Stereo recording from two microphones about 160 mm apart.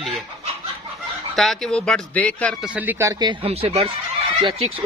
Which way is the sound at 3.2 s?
30° right (ahead or behind).